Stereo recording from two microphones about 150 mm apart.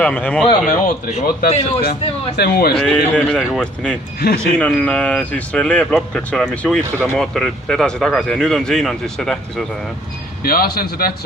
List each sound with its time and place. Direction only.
0.0 s speech: 10° left (ahead or behind)
0.7 s speech: 65° left (ahead or behind)
1.5 s speech: 45° left (ahead or behind)
1.8 s speech: 90° left
2.7 s speech: 5° left (ahead or behind)
10.4 s a man's voice: 80° left